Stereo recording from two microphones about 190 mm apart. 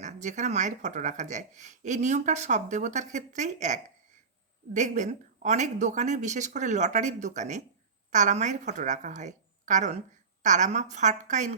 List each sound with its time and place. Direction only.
0.0 s speech: 40° right (ahead or behind)